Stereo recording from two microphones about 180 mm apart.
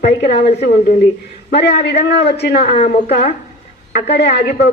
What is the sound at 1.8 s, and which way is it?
Speech, 65° left (ahead or behind).